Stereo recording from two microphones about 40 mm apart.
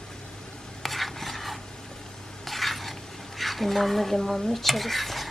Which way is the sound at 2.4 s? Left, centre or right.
Centre.